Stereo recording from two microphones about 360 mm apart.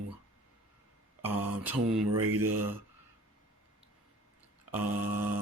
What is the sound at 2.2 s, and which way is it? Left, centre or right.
Speech, right.